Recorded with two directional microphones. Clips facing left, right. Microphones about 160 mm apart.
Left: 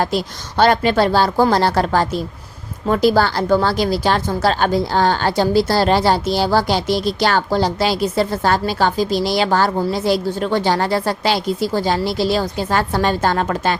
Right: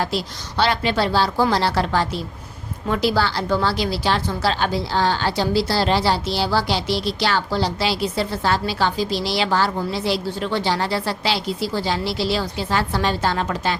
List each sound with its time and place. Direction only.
0.0 s a woman's voice: 50° left (ahead or behind)